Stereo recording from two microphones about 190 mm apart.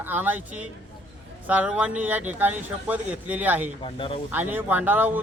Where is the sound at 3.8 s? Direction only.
25° left (ahead or behind).